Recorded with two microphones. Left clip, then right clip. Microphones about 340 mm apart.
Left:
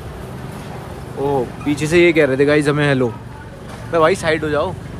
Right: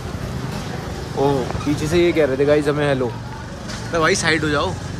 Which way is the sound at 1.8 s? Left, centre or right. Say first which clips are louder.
Left 4 dB; left.